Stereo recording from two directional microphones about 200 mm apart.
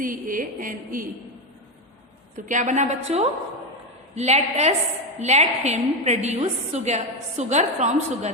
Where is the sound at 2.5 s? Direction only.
40° right (ahead or behind).